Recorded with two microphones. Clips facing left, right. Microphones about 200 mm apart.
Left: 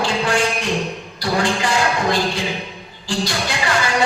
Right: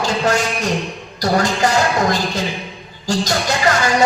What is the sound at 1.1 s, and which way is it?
Music, 40° right (ahead or behind).